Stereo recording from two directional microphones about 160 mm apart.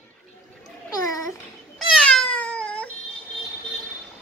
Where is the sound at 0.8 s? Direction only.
20° left (ahead or behind).